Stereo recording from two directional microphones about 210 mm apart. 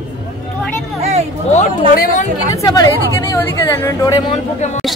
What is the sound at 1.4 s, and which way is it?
Speech, 35° left (ahead or behind).